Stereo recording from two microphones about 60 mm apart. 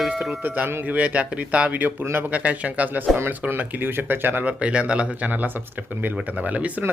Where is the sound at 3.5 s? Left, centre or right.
Right.